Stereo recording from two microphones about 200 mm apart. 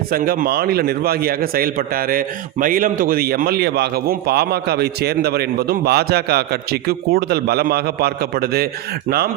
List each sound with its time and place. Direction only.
0.1 s a man's voice: 45° right (ahead or behind)